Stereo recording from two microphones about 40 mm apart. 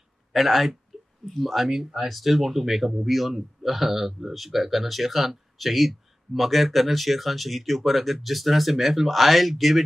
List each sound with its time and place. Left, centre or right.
0.3 s speech: centre